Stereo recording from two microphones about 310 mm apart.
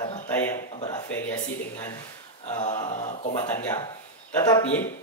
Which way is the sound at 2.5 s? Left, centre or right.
Left.